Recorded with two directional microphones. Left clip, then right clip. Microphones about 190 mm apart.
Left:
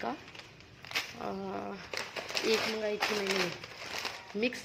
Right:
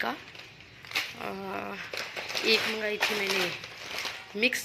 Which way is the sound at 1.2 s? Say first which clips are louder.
Right 3 dB; centre (ahead or behind).